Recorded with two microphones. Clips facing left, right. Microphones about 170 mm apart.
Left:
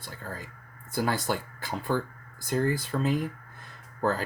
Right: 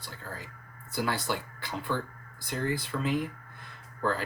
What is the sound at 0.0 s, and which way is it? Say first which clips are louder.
Speech: left 3 dB; 50° left (ahead or behind).